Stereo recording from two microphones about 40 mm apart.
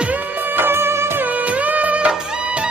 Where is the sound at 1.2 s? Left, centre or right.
Right.